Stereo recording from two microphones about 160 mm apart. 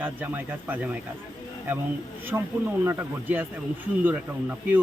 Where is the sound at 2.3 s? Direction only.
15° right (ahead or behind).